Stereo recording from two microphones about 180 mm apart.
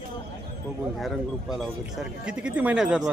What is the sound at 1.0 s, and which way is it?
Speech, centre (ahead or behind).